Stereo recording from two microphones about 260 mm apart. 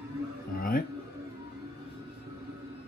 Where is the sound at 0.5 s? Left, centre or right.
Left.